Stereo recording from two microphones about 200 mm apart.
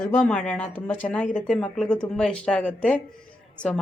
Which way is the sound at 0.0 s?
10° left (ahead or behind).